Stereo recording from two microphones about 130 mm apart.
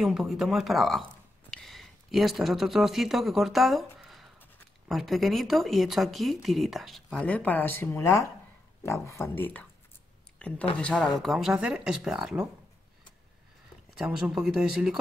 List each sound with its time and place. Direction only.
0.0 s speech: centre (ahead or behind)
13.9 s speech: 5° right (ahead or behind)